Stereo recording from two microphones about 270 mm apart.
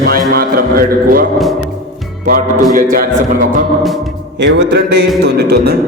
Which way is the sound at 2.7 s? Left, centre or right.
Right.